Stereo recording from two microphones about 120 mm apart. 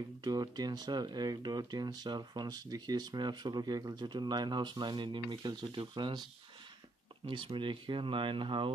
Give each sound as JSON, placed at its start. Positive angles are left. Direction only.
{"t": 0.2, "sound": "speech", "side_deg": -35}
{"t": 7.2, "sound": "speech", "side_deg": -45}